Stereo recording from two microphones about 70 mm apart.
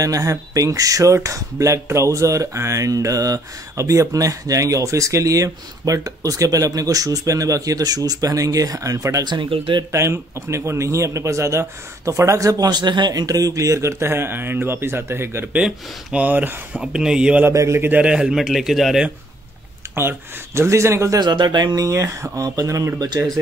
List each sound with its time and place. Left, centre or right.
0.0 s speech: right
9.2 s speech: right
9.8 s speech: right
15.5 s speech: centre
16.8 s speech: centre
17.5 s speech: right
17.8 s speech: right
18.1 s speech: centre
20.0 s a man's voice: right
21.2 s speech: right
21.8 s speech: right
23.0 s speech: right